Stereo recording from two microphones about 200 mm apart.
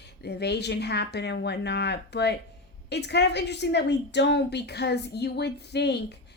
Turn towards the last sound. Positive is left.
turn(degrees=55)  # may be behind; listen again after turning